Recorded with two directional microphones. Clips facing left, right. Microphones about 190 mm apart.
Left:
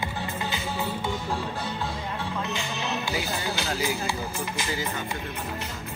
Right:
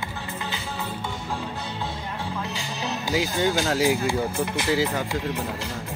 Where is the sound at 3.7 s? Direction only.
65° right (ahead or behind).